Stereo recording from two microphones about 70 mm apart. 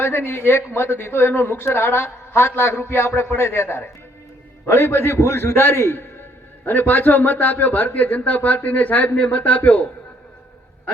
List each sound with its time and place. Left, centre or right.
0.0 s speech: left